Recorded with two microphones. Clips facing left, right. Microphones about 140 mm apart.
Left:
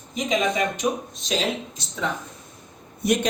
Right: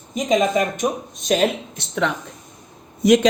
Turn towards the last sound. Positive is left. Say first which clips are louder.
# right 8 dB
turn(degrees=-90)